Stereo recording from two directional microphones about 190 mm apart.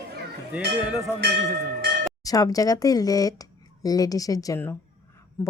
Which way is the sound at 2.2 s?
20° left (ahead or behind).